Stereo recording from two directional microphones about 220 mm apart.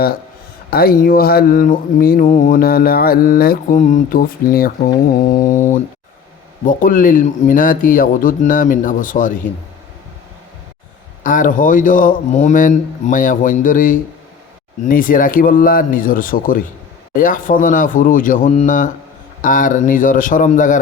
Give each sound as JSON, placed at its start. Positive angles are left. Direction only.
{"t": 0.7, "sound": "speech", "side_deg": 45}
{"t": 6.7, "sound": "speech", "side_deg": 40}
{"t": 11.2, "sound": "speech", "side_deg": 35}